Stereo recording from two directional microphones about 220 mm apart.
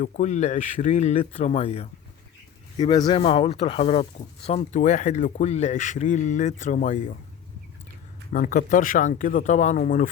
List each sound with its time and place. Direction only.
0.0 s speech: 35° left (ahead or behind)
8.3 s speech: 40° left (ahead or behind)